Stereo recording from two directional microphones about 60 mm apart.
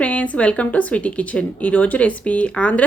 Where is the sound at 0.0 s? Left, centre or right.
Left.